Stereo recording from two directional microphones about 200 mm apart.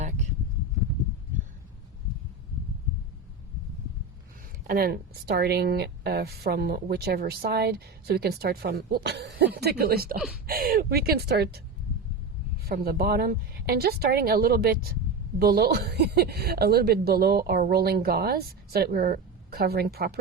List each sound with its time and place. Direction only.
4.6 s speech: 45° right (ahead or behind)
10.2 s speech: centre (ahead or behind)
10.4 s speech: 50° right (ahead or behind)
12.6 s speech: 50° right (ahead or behind)